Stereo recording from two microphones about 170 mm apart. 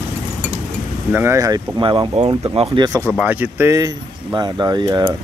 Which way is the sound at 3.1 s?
10° right (ahead or behind).